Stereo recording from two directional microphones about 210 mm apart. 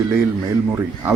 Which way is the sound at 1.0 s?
10° right (ahead or behind).